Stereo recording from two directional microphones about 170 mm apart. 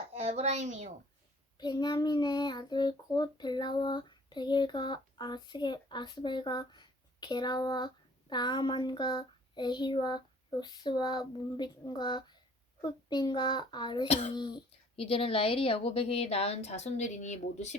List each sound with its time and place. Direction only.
0.1 s a woman's voice: 40° right (ahead or behind)
1.5 s child singing: 25° left (ahead or behind)
14.3 s speech: 25° left (ahead or behind); by 17.7 s 40° left (ahead or behind)